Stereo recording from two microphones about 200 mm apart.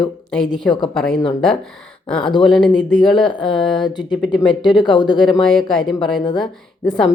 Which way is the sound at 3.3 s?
25° left (ahead or behind).